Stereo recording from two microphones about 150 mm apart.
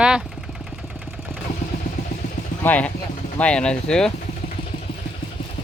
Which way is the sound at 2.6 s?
10° left (ahead or behind).